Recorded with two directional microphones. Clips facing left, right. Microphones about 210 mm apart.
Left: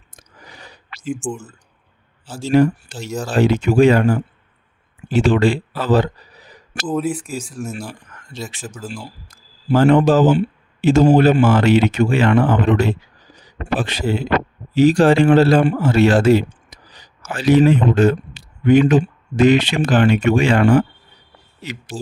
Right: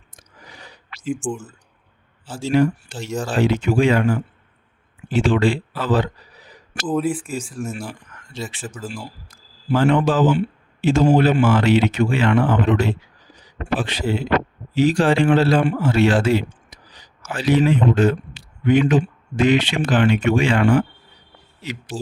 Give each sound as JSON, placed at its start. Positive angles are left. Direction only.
{"t": 1.1, "sound": "speech", "side_deg": 0}
{"t": 2.2, "sound": "speech", "side_deg": 40}
{"t": 3.1, "sound": "speech", "side_deg": 5}
{"t": 3.3, "sound": "speech", "side_deg": 40}
{"t": 6.8, "sound": "speech", "side_deg": 0}
{"t": 9.6, "sound": "speech", "side_deg": 40}